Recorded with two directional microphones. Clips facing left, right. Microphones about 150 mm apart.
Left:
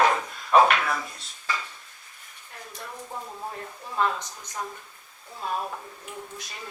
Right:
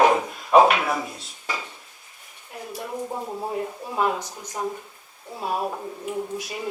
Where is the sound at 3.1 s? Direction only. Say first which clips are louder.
Right 6 dB; 30° right (ahead or behind).